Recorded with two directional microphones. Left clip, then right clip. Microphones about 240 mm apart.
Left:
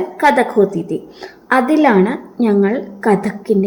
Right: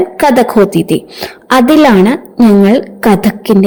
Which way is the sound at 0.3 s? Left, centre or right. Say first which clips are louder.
Right 6 dB; right.